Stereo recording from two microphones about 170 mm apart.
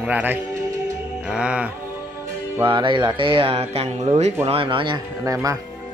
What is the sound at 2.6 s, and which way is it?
Speech, 25° right (ahead or behind).